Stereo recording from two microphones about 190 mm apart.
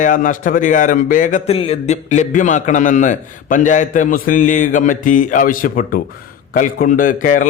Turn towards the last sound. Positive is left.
turn(degrees=45)  # may be behind; listen again after turning